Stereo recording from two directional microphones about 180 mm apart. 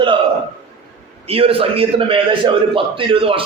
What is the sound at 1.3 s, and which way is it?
A man's voice, 30° right (ahead or behind).